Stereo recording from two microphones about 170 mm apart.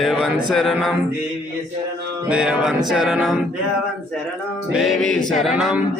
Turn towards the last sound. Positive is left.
turn(degrees=0)  # may be behind; listen again after turning